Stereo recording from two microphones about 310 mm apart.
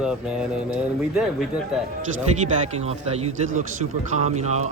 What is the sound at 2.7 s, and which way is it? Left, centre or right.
Speech, centre.